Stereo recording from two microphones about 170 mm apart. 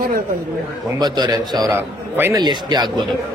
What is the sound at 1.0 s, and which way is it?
Speech, 25° right (ahead or behind).